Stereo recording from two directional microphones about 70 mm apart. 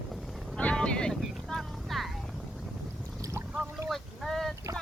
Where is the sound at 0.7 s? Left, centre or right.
Centre.